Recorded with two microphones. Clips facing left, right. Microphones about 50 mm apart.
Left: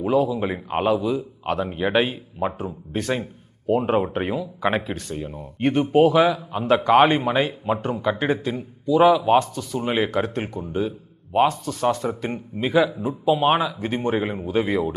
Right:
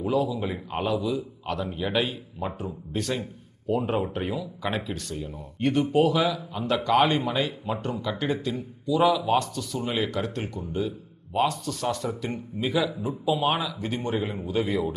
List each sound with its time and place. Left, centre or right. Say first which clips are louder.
0.0 s speech: left 5 dB; left